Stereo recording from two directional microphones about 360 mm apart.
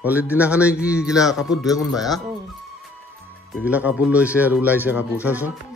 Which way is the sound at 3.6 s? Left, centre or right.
Centre.